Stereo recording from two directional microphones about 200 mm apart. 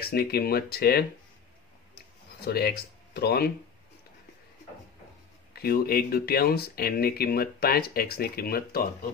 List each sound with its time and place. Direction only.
0.1 s speech: 50° left (ahead or behind)
2.4 s speech: 50° left (ahead or behind)
5.5 s speech: 50° left (ahead or behind)